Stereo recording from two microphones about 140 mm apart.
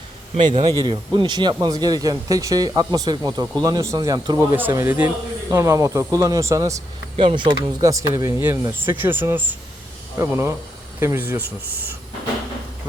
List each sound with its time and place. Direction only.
0.3 s speech: 35° right (ahead or behind)
4.5 s speech: 15° right (ahead or behind)
7.2 s speech: 35° right (ahead or behind); by 11.7 s 15° right (ahead or behind)